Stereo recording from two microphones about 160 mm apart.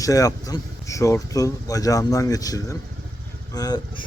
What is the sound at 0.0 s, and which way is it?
Speech, 20° left (ahead or behind).